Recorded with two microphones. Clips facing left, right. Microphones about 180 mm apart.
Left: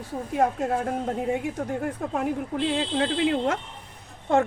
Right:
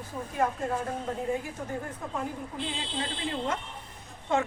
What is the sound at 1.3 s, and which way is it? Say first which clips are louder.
Speech: left 5 dB; 70° left (ahead or behind).